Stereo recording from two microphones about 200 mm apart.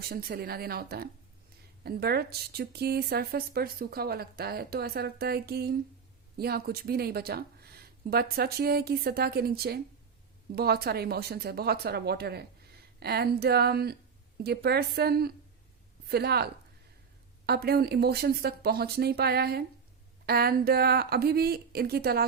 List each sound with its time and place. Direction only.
0.1 s speech: 50° right (ahead or behind)